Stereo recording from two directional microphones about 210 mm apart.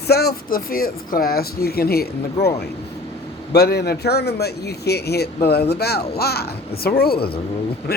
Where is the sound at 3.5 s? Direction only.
50° left (ahead or behind).